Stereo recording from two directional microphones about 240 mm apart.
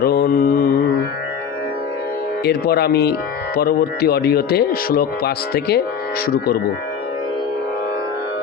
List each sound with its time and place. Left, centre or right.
0.0 s mantra: left
2.4 s speech: left